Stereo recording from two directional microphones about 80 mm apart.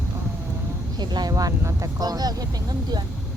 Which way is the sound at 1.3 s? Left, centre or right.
Right.